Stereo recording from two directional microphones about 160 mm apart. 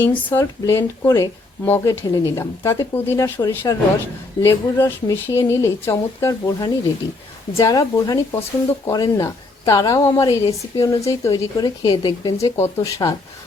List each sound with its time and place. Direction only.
0.0 s speech: 10° left (ahead or behind)